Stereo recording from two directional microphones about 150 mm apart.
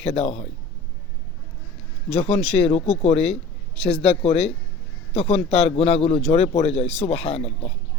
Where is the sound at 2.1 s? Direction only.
40° left (ahead or behind).